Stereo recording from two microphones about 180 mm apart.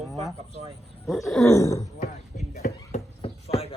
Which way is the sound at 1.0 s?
Centre (ahead or behind).